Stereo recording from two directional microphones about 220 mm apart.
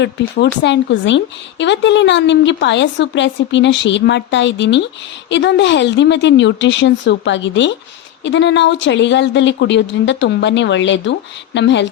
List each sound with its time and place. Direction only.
0.0 s speech: 55° left (ahead or behind)